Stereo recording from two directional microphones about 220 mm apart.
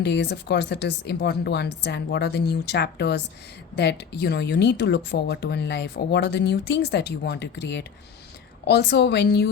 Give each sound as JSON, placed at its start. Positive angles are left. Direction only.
{"t": 0.0, "sound": "speech", "side_deg": 50}